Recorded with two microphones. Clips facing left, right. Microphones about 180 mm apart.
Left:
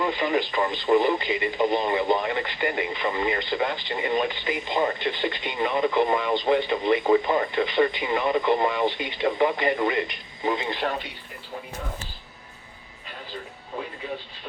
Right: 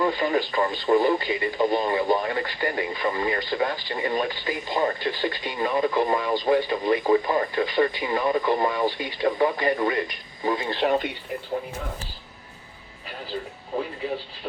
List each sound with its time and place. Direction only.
0.0 s speech: 20° left (ahead or behind)